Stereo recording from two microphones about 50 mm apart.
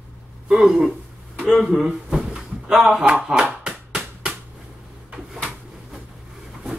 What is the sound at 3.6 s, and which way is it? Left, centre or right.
Music, centre.